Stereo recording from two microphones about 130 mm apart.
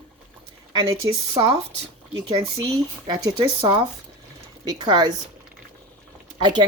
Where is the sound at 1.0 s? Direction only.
30° right (ahead or behind).